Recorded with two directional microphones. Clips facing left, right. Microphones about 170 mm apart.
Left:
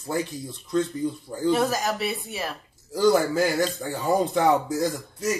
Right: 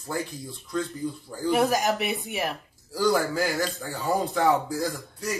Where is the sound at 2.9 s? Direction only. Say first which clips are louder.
Left 4 dB; 20° left (ahead or behind).